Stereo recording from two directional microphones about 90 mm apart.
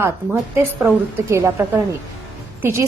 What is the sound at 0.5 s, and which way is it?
A woman's voice, 25° right (ahead or behind).